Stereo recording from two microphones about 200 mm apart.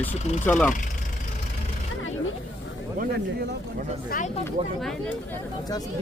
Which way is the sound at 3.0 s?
55° right (ahead or behind).